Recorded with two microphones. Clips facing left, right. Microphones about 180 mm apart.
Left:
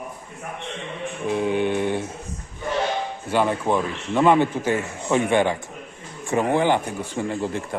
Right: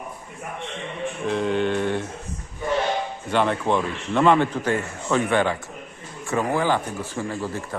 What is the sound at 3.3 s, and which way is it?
A man's voice, 10° left (ahead or behind).